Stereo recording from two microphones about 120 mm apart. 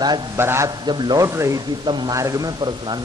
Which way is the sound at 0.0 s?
35° right (ahead or behind).